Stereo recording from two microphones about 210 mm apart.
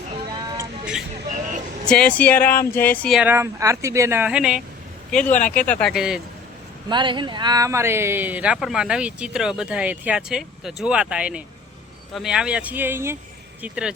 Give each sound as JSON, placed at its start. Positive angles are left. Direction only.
{"t": 0.3, "sound": "a sound", "side_deg": -20}
{"t": 1.9, "sound": "speech", "side_deg": 5}
{"t": 3.2, "sound": "speech", "side_deg": -10}
{"t": 5.3, "sound": "speech", "side_deg": 35}
{"t": 5.5, "sound": "speech", "side_deg": 5}
{"t": 6.8, "sound": "speech", "side_deg": -20}